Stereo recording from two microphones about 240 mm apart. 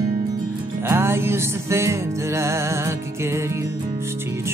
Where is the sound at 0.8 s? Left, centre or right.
Centre.